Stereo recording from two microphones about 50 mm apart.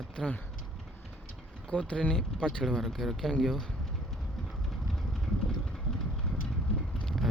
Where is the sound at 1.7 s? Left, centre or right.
Left.